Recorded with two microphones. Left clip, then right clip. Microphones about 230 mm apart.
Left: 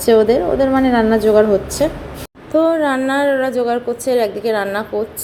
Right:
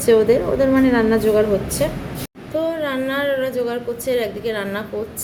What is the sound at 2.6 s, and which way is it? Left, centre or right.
A woman's voice, centre.